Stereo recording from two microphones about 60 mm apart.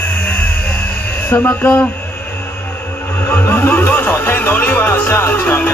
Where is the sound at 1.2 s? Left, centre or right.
Left.